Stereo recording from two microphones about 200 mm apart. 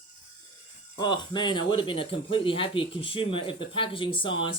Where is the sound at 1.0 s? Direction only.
20° left (ahead or behind).